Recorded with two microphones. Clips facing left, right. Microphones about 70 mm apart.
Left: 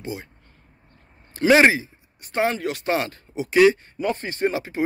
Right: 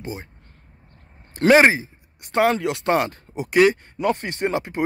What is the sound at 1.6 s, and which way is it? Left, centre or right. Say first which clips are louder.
Speech: right 1 dB; right.